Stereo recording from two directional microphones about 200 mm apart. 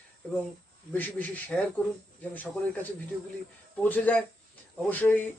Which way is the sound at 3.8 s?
10° left (ahead or behind).